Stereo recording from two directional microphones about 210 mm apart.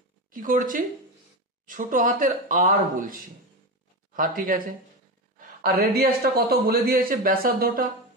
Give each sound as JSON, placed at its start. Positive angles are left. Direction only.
{"t": 0.3, "sound": "a man's voice", "side_deg": -40}